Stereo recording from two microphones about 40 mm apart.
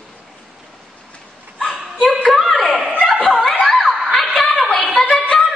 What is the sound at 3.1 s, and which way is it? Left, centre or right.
Snicker, left.